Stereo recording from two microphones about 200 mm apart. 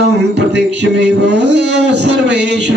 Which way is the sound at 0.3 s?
60° right (ahead or behind).